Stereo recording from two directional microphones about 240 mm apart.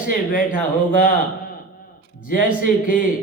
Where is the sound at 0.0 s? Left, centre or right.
Left.